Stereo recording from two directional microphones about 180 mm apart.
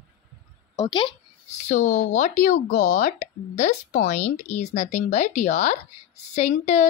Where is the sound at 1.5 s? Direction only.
40° left (ahead or behind).